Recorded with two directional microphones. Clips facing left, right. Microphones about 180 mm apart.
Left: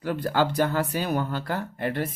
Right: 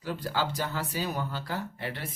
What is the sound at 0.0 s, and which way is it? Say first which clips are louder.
Speech: left 7 dB; 60° left (ahead or behind).